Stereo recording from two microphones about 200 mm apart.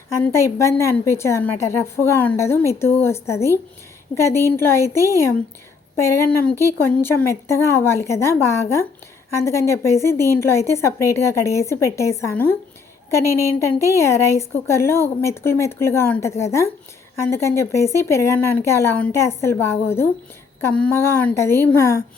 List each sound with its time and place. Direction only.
0.2 s a woman's voice: 15° left (ahead or behind)